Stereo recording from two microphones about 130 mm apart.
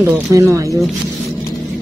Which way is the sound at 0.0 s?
25° right (ahead or behind).